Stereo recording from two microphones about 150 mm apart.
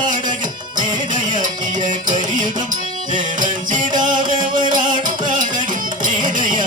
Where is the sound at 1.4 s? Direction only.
55° right (ahead or behind).